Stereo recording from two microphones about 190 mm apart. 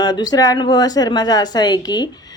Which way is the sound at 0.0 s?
20° left (ahead or behind).